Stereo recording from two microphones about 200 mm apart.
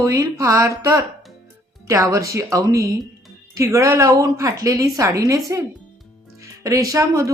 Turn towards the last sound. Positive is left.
turn(degrees=-15)  # may be behind; listen again after turning